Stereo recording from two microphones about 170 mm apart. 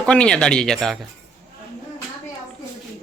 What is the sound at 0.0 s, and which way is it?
Speech, 5° left (ahead or behind).